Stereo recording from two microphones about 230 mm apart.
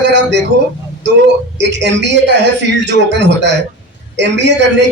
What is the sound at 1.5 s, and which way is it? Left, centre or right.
A man's voice, right.